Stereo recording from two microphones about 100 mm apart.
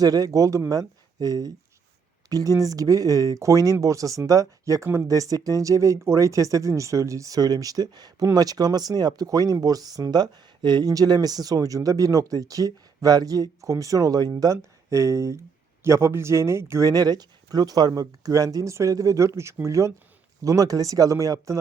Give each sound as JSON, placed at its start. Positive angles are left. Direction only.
{"t": 0.0, "sound": "speech", "side_deg": -35}